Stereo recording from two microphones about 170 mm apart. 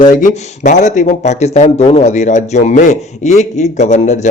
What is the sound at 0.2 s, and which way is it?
Speech, 50° left (ahead or behind).